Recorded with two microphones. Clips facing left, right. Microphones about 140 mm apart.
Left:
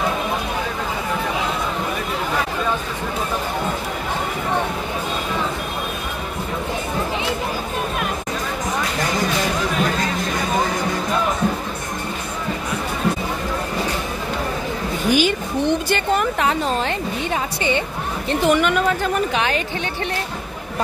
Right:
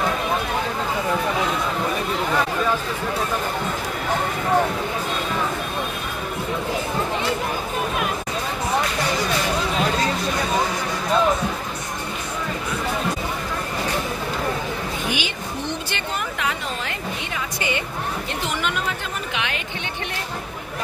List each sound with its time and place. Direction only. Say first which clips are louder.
15.0 s a woman's voice: left 9 dB; 40° left (ahead or behind)
18.5 s speech: left 10 dB; 55° left (ahead or behind)
19.3 s a woman's voice: left 7 dB; 35° left (ahead or behind)